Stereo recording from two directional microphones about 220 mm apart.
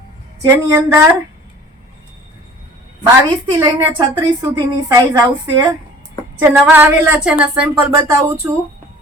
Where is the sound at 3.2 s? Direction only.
20° right (ahead or behind); by 7.5 s 5° right (ahead or behind).